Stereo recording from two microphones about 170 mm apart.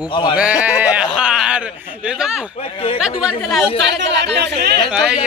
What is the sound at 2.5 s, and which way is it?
Speech, 35° left (ahead or behind).